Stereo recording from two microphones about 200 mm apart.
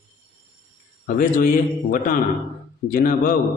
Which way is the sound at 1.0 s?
45° left (ahead or behind).